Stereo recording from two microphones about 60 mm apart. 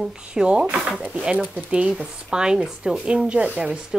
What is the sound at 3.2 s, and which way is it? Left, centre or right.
Speech, right.